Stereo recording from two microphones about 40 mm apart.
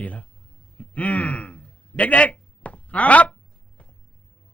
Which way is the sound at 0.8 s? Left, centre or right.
Left.